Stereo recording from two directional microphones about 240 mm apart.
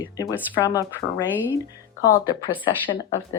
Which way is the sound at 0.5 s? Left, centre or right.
Centre.